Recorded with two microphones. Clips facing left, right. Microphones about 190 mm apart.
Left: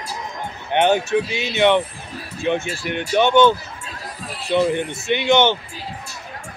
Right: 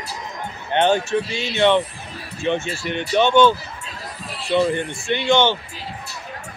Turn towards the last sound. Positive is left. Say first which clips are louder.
# left 1 dB
turn(degrees=20)  # may be behind; listen again after turning